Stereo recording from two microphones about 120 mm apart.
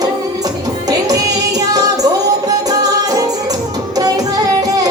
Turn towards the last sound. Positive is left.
turn(degrees=-30)  # may be behind; listen again after turning